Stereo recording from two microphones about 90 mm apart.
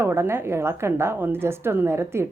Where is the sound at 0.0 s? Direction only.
30° right (ahead or behind).